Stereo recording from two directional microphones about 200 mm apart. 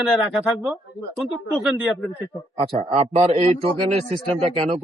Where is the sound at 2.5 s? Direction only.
30° right (ahead or behind).